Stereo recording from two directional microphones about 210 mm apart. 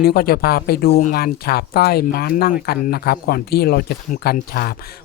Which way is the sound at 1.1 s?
45° left (ahead or behind).